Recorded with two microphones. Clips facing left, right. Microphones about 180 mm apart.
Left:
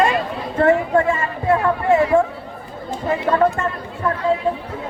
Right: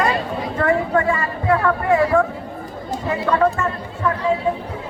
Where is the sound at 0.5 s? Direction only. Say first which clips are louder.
Left 3 dB; 25° left (ahead or behind).